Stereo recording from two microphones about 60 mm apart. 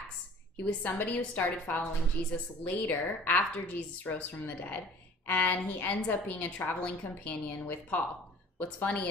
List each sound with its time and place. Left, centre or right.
0.7 s a woman's voice: left